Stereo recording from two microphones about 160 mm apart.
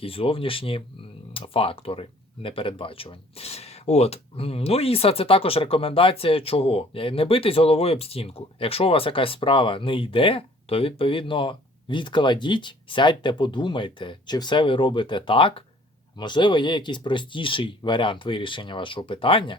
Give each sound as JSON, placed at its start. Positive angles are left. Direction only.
{"t": 0.0, "sound": "speech", "side_deg": 35}